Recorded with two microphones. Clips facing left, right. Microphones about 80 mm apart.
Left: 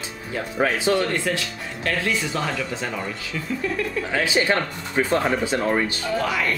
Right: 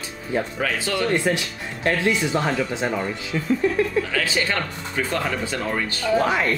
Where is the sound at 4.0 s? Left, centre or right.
Left.